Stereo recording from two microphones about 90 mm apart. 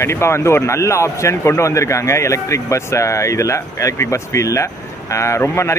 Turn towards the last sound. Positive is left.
turn(degrees=30)  # may be behind; listen again after turning